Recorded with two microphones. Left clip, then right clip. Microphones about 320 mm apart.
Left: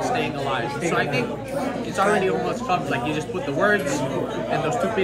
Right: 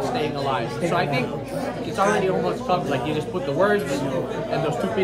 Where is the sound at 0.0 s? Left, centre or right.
Centre.